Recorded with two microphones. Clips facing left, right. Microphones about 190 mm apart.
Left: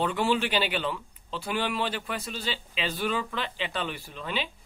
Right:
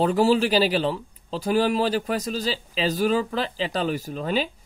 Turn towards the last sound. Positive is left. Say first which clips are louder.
# right 8 dB
turn(degrees=-40)  # may be behind; listen again after turning